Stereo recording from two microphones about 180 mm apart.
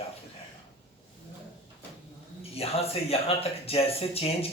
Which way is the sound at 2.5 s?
35° left (ahead or behind).